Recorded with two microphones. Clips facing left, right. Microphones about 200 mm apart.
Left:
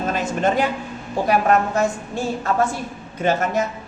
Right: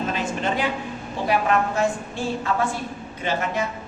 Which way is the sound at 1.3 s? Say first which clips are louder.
Left 3 dB; 45° left (ahead or behind).